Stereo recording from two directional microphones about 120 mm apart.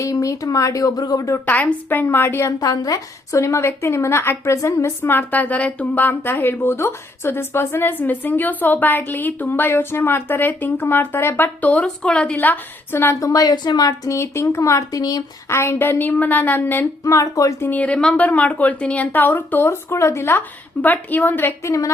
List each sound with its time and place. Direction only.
0.0 s a woman's voice: 25° left (ahead or behind)
1.5 s a woman's voice: 15° left (ahead or behind)
17.7 s a woman's voice: 10° left (ahead or behind)